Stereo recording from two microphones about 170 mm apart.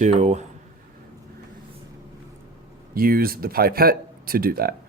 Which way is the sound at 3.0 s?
60° right (ahead or behind).